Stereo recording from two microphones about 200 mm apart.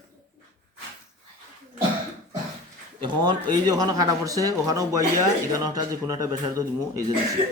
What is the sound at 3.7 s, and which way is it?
Speech, 20° right (ahead or behind).